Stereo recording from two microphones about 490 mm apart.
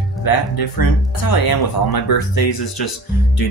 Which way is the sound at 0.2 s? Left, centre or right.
Left.